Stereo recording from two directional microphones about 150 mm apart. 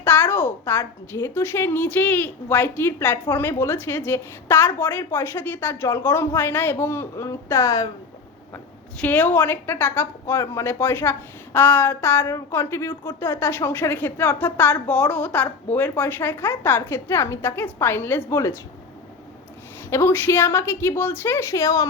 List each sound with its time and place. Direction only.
0.0 s a woman's voice: 15° left (ahead or behind)
9.0 s a woman's voice: 10° left (ahead or behind)
19.9 s a woman's voice: 15° left (ahead or behind)